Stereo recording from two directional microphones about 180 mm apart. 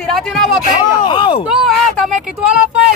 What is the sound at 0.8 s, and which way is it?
Speech, 25° left (ahead or behind).